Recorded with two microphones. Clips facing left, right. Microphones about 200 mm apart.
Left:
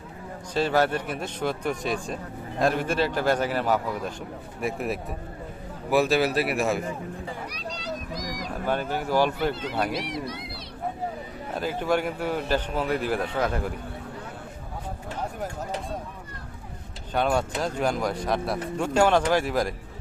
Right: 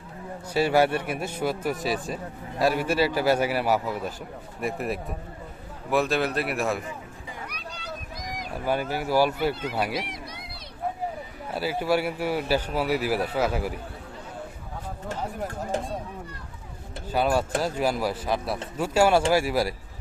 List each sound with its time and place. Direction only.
0.5 s speech: 10° right (ahead or behind)
7.5 s a sound: 55° right (ahead or behind)
8.6 s speech: 10° right (ahead or behind)
9.9 s speech: 55° right (ahead or behind)
11.5 s speech: 10° right (ahead or behind)
17.1 s speech: 5° right (ahead or behind)